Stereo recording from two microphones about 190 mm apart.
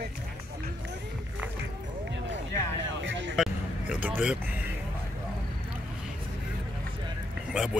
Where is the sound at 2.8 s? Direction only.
75° right (ahead or behind).